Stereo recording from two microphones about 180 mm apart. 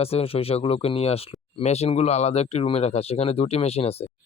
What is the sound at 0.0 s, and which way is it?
Speech, 35° left (ahead or behind).